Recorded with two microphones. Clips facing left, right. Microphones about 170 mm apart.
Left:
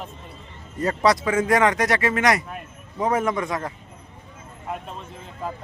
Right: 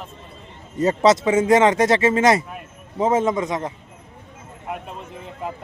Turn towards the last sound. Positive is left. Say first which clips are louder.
# right 3 dB
turn(degrees=-20)  # may be behind; listen again after turning